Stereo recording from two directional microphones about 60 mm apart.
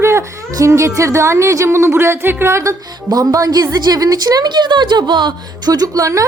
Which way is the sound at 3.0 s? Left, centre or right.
Right.